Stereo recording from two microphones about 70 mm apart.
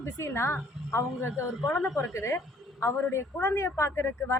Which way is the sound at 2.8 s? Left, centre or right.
Left.